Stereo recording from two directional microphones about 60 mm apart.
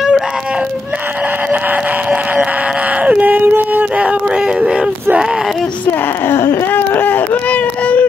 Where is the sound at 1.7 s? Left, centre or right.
Right.